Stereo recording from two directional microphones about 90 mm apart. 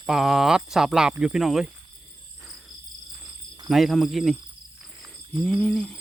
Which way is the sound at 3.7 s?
Centre (ahead or behind).